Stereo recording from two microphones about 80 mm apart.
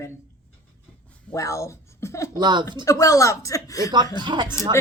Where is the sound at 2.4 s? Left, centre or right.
Right.